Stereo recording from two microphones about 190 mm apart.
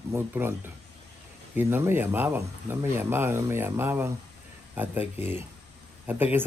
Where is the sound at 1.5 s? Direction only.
10° right (ahead or behind).